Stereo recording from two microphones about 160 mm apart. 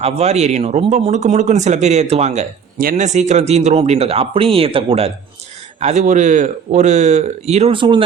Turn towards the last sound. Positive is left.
turn(degrees=-30)  # may be behind; listen again after turning